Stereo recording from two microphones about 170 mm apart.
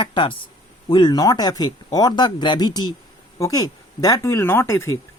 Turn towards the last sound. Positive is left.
turn(degrees=15)  # may be behind; listen again after turning